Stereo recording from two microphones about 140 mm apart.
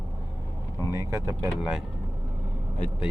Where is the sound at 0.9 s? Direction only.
20° right (ahead or behind).